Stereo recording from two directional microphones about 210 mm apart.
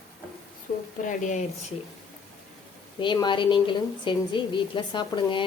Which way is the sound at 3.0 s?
20° left (ahead or behind).